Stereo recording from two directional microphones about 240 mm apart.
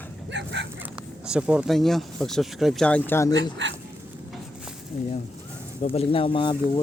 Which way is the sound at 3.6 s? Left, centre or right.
Right.